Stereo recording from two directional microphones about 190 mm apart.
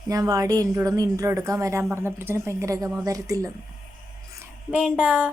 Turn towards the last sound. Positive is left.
turn(degrees=-5)  # may be behind; listen again after turning